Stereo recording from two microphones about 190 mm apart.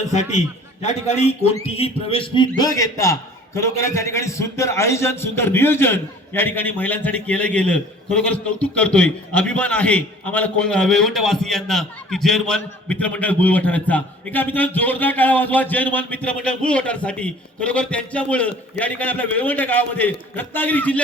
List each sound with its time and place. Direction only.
0.8 s a man's voice: 35° left (ahead or behind); by 21.0 s 10° left (ahead or behind)